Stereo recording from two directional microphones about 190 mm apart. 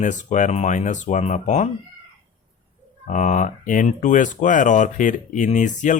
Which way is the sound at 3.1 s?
40° left (ahead or behind).